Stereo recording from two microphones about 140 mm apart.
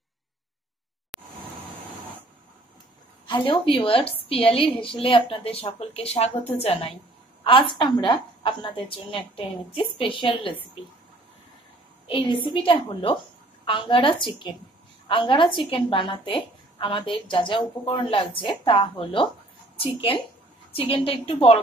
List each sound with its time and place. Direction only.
1.1 s a sound: 5° right (ahead or behind)
3.3 s a woman's voice: 35° left (ahead or behind)
12.1 s a woman's voice: 35° left (ahead or behind)